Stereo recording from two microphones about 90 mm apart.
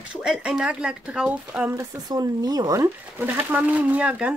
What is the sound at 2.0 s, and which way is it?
Speech, 50° right (ahead or behind).